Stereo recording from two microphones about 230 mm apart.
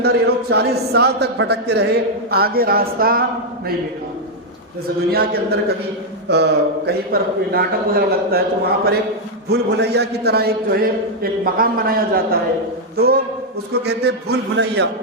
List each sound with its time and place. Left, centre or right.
0.0 s a man's voice: right
5.1 s a man's voice: right
9.5 s a man's voice: right